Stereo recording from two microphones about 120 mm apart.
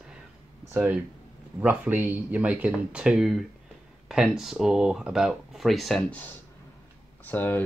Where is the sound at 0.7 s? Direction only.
15° right (ahead or behind); by 6.2 s 5° left (ahead or behind).